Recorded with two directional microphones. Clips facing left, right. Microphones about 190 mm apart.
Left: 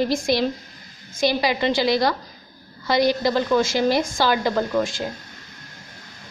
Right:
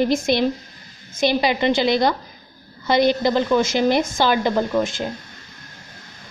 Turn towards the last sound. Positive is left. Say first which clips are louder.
# right 2 dB
turn(degrees=-20)  # may be behind; listen again after turning